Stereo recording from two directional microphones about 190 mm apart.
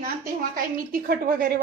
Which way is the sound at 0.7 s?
50° right (ahead or behind).